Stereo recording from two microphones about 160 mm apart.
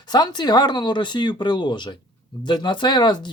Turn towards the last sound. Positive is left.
turn(degrees=25)  # may be behind; listen again after turning